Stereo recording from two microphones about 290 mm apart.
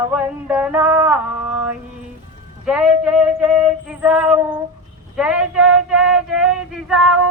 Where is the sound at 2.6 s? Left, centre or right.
Centre.